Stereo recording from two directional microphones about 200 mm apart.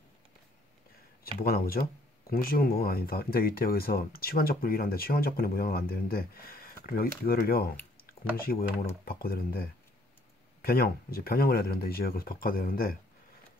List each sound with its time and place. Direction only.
1.4 s speech: 45° left (ahead or behind)